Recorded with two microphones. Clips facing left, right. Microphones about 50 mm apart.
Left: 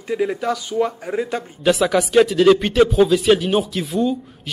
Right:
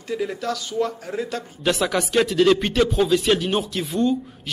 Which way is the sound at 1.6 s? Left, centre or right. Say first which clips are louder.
Left 5 dB; centre.